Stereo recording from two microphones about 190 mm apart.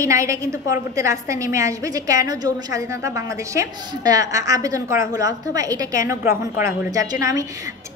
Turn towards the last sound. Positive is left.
turn(degrees=-15)  # may be behind; listen again after turning